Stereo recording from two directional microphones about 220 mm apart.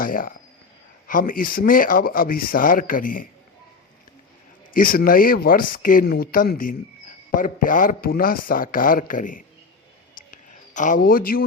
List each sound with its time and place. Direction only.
0.0 s speech: 40° left (ahead or behind)
4.7 s speech: 40° left (ahead or behind)
10.2 s a sound: 35° left (ahead or behind)